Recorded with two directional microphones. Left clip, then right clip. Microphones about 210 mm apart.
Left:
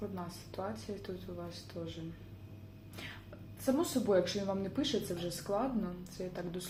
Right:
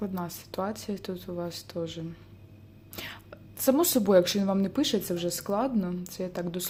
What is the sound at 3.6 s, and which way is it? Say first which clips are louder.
Speech: right 9 dB; 50° right (ahead or behind).